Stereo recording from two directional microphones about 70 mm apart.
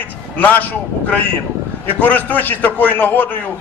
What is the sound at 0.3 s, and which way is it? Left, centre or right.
A man's voice, left.